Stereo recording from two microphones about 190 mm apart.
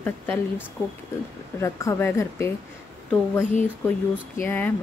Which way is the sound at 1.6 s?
15° left (ahead or behind).